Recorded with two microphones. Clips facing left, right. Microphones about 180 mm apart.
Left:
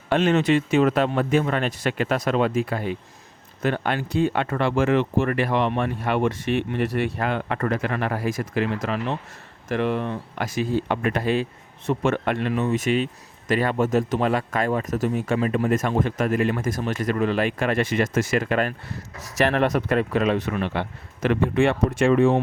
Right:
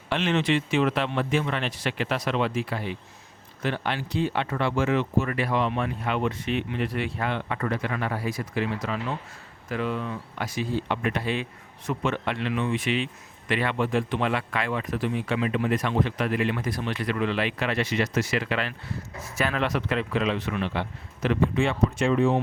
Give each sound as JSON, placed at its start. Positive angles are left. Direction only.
{"t": 0.1, "sound": "speech", "side_deg": 45}
{"t": 8.8, "sound": "speech", "side_deg": 65}
{"t": 10.4, "sound": "speech", "side_deg": 45}